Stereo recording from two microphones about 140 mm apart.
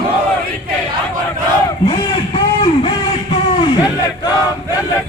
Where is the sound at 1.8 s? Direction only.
35° left (ahead or behind).